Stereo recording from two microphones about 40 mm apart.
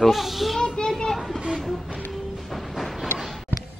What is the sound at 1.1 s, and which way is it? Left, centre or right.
Vehicle, centre.